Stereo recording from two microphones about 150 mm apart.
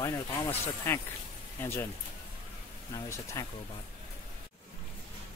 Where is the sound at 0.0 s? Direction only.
15° left (ahead or behind).